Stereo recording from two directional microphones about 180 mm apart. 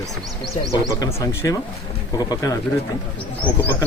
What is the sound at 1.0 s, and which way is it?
A man's voice, 20° left (ahead or behind).